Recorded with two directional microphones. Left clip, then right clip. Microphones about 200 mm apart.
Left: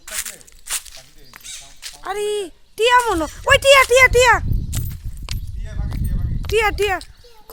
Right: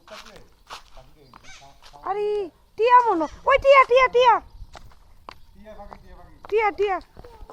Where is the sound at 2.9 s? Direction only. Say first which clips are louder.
Even; 60° left (ahead or behind).